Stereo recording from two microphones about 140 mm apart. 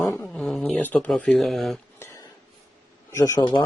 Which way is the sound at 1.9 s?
20° left (ahead or behind).